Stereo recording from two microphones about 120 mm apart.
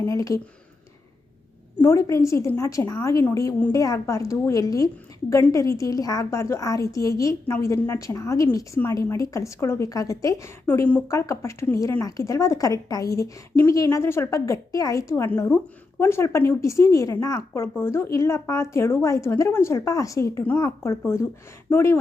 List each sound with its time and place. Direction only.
0.0 s speech: 25° left (ahead or behind)
1.8 s speech: 25° left (ahead or behind)